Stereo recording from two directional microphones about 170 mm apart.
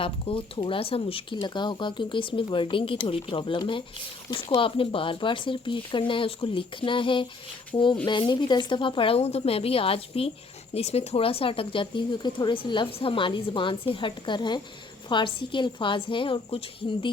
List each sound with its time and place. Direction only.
0.0 s speech: 35° left (ahead or behind)